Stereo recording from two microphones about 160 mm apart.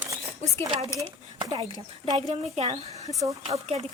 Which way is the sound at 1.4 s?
35° right (ahead or behind).